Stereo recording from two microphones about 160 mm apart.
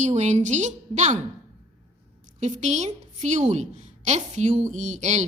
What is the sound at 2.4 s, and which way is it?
A woman's voice, 45° right (ahead or behind).